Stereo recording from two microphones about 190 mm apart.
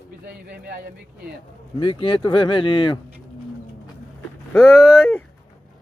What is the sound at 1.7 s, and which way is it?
Speech, 25° left (ahead or behind).